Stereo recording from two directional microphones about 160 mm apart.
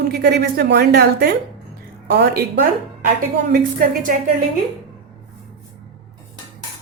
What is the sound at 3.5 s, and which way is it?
Speech, 65° right (ahead or behind).